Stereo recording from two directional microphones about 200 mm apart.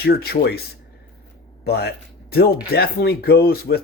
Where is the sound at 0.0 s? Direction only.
50° left (ahead or behind).